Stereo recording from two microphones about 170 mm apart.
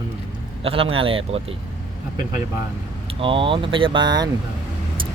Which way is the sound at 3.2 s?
30° right (ahead or behind).